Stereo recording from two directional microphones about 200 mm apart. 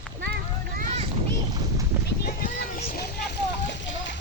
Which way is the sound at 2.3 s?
45° left (ahead or behind).